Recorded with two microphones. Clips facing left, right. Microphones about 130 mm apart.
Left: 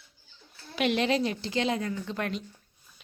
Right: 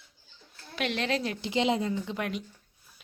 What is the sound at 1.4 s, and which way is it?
A woman's voice, 20° right (ahead or behind).